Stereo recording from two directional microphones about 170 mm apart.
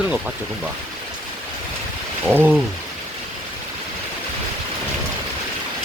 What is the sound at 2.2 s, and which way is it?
Speech, 10° right (ahead or behind).